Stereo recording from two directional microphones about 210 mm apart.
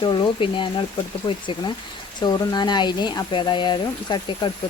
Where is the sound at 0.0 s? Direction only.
20° left (ahead or behind).